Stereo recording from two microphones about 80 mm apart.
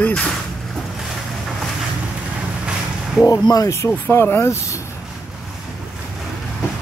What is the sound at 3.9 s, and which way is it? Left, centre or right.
Speech, left.